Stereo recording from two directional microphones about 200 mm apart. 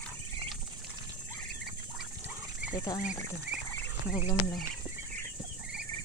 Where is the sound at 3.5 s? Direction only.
5° right (ahead or behind).